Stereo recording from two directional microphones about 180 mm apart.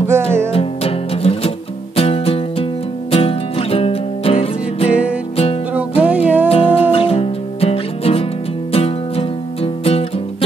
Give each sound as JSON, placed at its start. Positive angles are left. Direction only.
{"t": 0.0, "sound": "music", "side_deg": -15}
{"t": 0.5, "sound": "music", "side_deg": 30}
{"t": 5.7, "sound": "music", "side_deg": -10}
{"t": 6.5, "sound": "music", "side_deg": 30}